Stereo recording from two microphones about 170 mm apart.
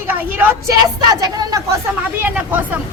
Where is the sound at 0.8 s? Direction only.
25° right (ahead or behind).